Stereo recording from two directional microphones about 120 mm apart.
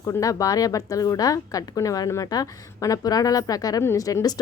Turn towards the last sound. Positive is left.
turn(degrees=30)  # may be behind; listen again after turning